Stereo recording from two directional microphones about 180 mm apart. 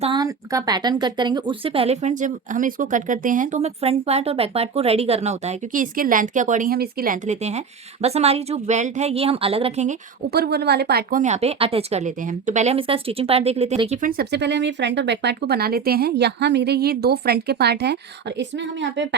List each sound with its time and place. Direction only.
0.0 s speech: 25° right (ahead or behind); by 10.0 s 40° right (ahead or behind)
10.3 s speech: 60° right (ahead or behind)
11.2 s speech: 35° right (ahead or behind)
14.2 s speech: 70° right (ahead or behind)